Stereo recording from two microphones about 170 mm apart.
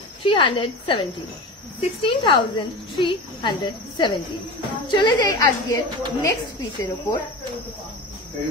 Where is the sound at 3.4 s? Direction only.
30° left (ahead or behind).